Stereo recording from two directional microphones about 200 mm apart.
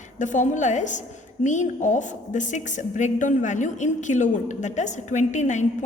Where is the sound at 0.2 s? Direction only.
40° left (ahead or behind).